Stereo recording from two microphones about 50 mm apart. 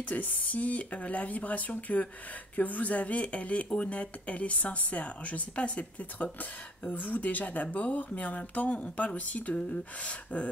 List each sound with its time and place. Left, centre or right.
0.1 s speech: left